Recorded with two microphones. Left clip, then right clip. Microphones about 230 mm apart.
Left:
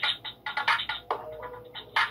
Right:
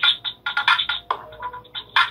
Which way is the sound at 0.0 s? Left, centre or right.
Right.